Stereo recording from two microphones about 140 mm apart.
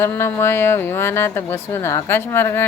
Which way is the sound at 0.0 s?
20° left (ahead or behind).